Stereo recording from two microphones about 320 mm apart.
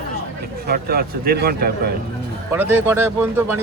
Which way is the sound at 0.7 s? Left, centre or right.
Right.